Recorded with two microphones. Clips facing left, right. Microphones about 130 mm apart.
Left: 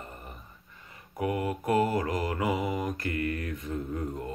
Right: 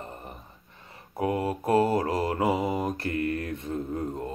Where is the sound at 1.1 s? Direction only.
30° right (ahead or behind).